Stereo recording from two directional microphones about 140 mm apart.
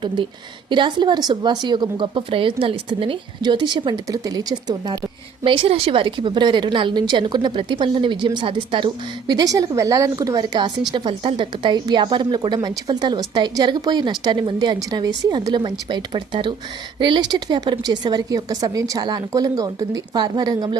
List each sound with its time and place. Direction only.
0.2 s a woman's voice: 35° right (ahead or behind)
5.4 s a woman's voice: 40° right (ahead or behind)